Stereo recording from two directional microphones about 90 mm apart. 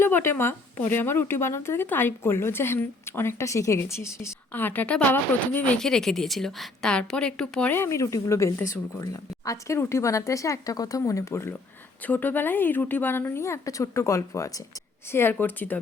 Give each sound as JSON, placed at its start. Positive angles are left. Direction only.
{"t": 0.0, "sound": "speech", "side_deg": 25}
{"t": 4.5, "sound": "speech", "side_deg": 20}
{"t": 5.7, "sound": "a woman's voice", "side_deg": 5}
{"t": 7.7, "sound": "speech", "side_deg": 30}
{"t": 12.0, "sound": "speech", "side_deg": 20}
{"t": 15.1, "sound": "speech", "side_deg": 25}